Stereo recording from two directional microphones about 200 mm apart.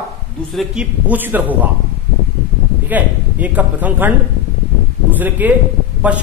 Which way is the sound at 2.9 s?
10° right (ahead or behind).